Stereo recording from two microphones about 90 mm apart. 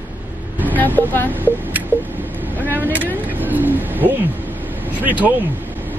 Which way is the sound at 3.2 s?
20° right (ahead or behind).